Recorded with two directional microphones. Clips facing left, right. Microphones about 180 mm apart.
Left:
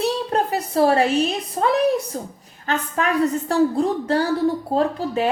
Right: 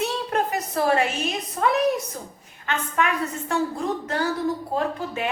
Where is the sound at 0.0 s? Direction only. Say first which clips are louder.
Left 3 dB; 35° left (ahead or behind).